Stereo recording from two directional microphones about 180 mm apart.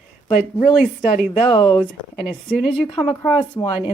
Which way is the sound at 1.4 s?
30° left (ahead or behind).